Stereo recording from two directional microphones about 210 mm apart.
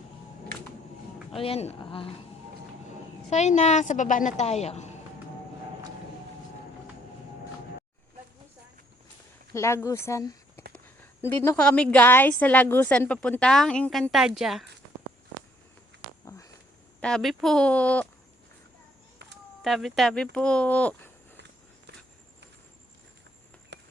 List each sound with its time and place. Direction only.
1.4 s speech: 30° left (ahead or behind)
3.2 s a woman's voice: 35° left (ahead or behind)
9.5 s speech: 15° left (ahead or behind)
10.7 s a sound: 10° left (ahead or behind)
11.4 s a woman's voice: 5° left (ahead or behind)
17.0 s a woman's voice: 5° left (ahead or behind)
19.6 s a woman's voice: centre (ahead or behind)
23.7 s a sound: 55° right (ahead or behind)